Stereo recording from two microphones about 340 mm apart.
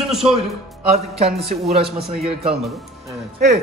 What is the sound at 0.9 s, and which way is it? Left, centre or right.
A man's voice, centre.